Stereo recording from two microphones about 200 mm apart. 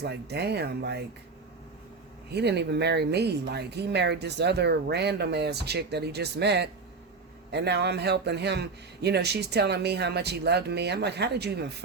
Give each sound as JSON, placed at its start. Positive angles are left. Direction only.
{"t": 0.0, "sound": "speech", "side_deg": -55}
{"t": 2.3, "sound": "speech", "side_deg": -55}